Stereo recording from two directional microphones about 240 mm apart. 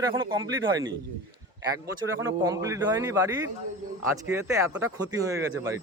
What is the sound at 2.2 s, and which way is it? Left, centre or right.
Speech, centre.